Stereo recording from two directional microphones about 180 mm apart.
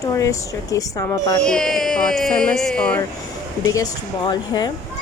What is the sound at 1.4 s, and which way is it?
Music, 5° left (ahead or behind).